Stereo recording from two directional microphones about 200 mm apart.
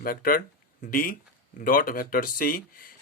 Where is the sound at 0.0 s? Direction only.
45° left (ahead or behind).